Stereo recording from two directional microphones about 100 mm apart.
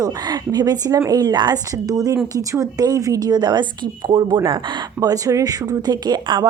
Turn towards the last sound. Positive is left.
turn(degrees=-45)  # may be behind; listen again after turning